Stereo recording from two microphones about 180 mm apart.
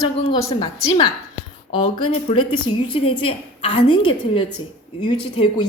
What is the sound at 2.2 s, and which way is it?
A woman's voice, 30° left (ahead or behind).